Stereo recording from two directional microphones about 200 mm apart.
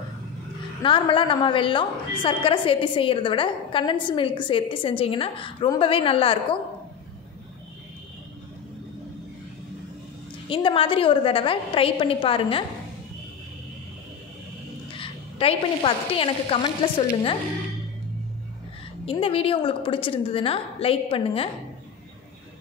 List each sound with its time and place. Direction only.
0.8 s a woman's voice: 25° left (ahead or behind)
10.5 s a woman's voice: 25° left (ahead or behind)
15.0 s a woman's voice: 30° left (ahead or behind)
19.0 s a woman's voice: 25° left (ahead or behind)